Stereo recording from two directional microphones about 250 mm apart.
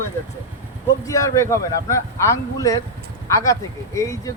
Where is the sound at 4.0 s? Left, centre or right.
Centre.